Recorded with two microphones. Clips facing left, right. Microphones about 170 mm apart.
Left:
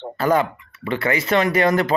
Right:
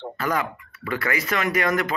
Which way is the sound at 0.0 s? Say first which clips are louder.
Left 7 dB; 30° left (ahead or behind).